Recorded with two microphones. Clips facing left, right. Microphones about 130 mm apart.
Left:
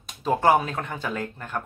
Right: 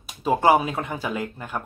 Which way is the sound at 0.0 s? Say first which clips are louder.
Right 2 dB; 10° right (ahead or behind).